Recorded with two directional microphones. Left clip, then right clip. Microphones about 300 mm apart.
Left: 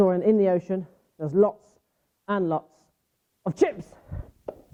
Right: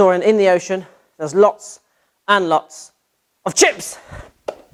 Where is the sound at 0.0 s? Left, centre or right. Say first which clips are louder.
Right 8 dB; centre.